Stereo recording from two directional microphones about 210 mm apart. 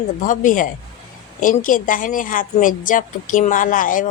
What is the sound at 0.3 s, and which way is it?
A woman's voice, 40° left (ahead or behind).